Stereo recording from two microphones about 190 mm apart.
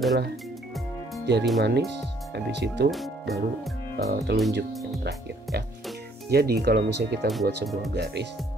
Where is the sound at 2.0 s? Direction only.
65° right (ahead or behind).